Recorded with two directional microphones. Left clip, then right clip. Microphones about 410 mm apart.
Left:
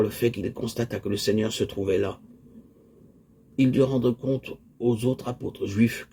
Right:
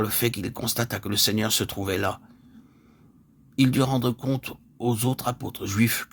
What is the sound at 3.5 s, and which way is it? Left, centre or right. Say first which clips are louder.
A man's voice: left 1 dB; right.